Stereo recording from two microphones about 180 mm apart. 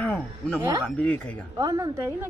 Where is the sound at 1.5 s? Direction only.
20° right (ahead or behind).